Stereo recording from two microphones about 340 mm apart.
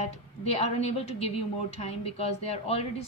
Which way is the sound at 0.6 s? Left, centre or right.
Centre.